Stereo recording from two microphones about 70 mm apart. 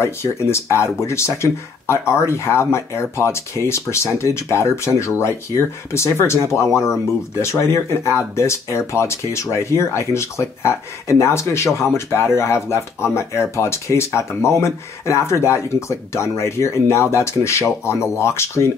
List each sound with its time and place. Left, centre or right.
0.0 s speech: left